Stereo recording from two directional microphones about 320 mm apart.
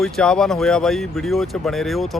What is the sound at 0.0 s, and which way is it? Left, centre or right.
Speech, centre.